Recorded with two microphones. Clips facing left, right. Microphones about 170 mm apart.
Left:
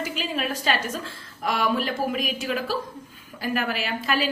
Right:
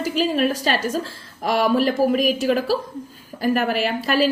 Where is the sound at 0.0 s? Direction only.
45° right (ahead or behind).